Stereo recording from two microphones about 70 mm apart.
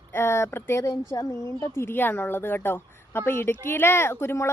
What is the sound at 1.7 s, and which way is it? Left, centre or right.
A woman's voice, left.